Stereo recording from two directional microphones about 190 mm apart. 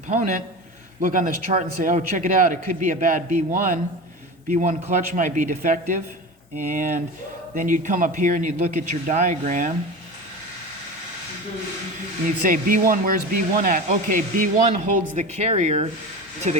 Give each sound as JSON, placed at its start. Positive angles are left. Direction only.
{"t": 0.1, "sound": "a man's voice", "side_deg": -40}
{"t": 12.4, "sound": "a man's voice", "side_deg": -45}